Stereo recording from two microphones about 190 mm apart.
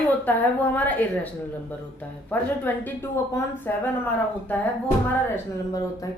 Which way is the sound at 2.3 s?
10° left (ahead or behind).